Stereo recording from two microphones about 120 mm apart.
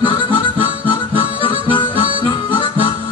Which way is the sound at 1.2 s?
45° left (ahead or behind).